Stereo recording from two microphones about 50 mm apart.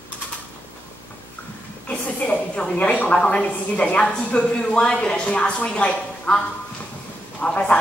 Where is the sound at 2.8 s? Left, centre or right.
Left.